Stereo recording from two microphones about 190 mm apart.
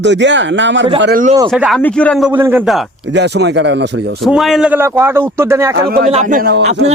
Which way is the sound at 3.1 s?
65° right (ahead or behind).